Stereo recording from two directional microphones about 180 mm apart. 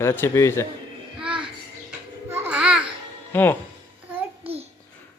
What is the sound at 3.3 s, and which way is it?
Speech, 10° left (ahead or behind).